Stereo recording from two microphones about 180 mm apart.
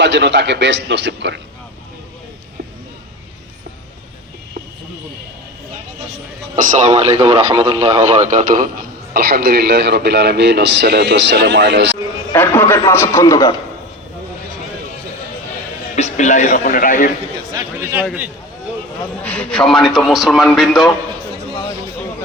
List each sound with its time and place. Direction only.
0.0 s a man's voice: 80° right
6.6 s speech: 35° right (ahead or behind)
9.1 s speech: 60° right (ahead or behind); by 11.9 s 90° right
12.3 s a man's voice: 10° left (ahead or behind)
16.0 s a man's voice: 40° left (ahead or behind)
17.7 s a man's voice: 15° right (ahead or behind)
19.2 s a man's voice: 10° left (ahead or behind)